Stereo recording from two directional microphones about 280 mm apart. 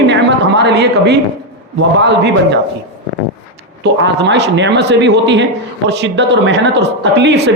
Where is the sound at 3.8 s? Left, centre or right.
Right.